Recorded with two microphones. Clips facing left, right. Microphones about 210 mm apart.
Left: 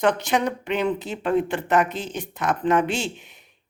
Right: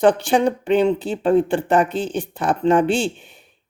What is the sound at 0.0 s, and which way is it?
Speech, 30° right (ahead or behind).